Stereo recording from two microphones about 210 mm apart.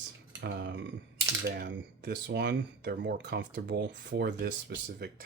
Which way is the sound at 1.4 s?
45° right (ahead or behind).